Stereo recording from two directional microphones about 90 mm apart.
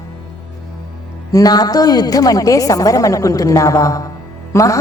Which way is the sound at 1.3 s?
45° left (ahead or behind).